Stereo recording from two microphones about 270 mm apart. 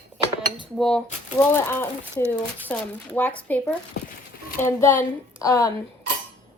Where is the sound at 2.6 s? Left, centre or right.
Centre.